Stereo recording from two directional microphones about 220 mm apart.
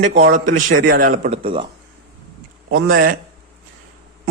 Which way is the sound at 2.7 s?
40° right (ahead or behind).